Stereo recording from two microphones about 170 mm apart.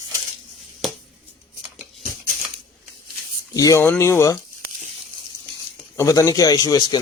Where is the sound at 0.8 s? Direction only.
Centre (ahead or behind).